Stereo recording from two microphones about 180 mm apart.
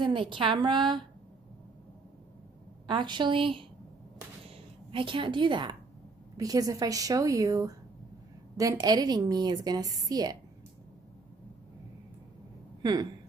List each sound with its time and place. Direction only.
0.0 s a woman's voice: 30° right (ahead or behind)
2.9 s a woman's voice: 25° right (ahead or behind)
4.9 s a woman's voice: 30° right (ahead or behind)
12.8 s a woman's voice: 20° right (ahead or behind)